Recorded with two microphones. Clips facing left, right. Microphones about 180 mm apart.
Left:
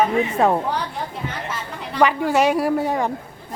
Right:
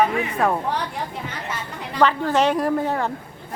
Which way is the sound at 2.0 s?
10° left (ahead or behind).